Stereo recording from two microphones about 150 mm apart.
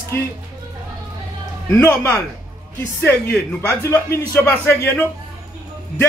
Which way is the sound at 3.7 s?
10° left (ahead or behind).